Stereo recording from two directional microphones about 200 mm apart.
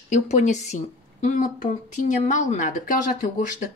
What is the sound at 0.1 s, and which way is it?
A woman's voice, 35° left (ahead or behind).